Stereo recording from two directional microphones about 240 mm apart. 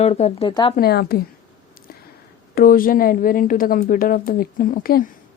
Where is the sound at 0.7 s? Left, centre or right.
Left.